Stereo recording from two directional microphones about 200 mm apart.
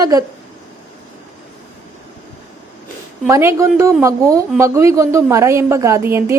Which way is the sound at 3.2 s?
15° right (ahead or behind).